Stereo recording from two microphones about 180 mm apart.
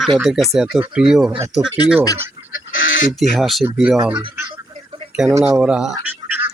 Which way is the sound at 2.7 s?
90° left.